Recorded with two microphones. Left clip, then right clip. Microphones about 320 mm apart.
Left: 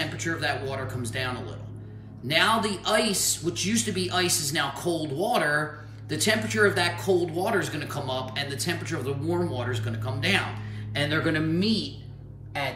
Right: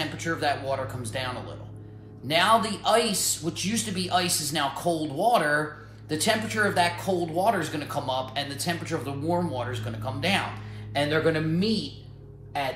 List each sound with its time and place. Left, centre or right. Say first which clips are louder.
0.0 s speech: right 1 dB; centre